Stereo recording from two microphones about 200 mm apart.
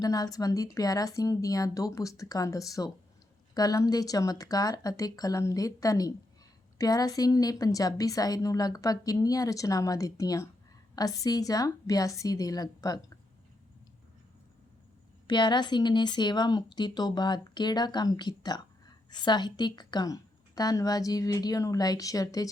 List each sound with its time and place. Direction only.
0.0 s a woman's voice: 15° left (ahead or behind)
15.3 s a woman's voice: 20° left (ahead or behind)